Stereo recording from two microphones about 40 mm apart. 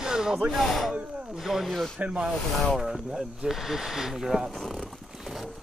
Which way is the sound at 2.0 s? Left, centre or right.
Right.